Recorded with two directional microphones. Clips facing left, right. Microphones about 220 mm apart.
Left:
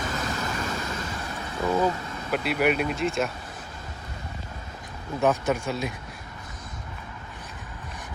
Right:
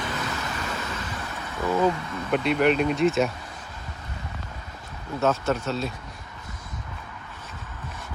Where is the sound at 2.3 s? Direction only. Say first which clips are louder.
Right 3 dB; 5° left (ahead or behind).